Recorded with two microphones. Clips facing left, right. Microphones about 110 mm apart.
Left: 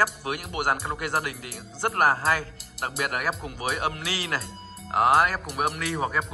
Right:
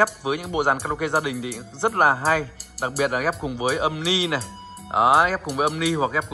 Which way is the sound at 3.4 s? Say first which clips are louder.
Right 6 dB; 15° right (ahead or behind).